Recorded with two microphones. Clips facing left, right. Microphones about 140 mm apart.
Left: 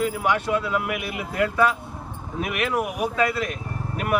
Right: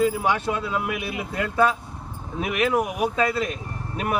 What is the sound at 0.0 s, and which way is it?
Speech, 25° right (ahead or behind).